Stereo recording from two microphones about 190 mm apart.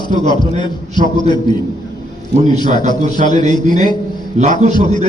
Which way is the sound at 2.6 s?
45° right (ahead or behind).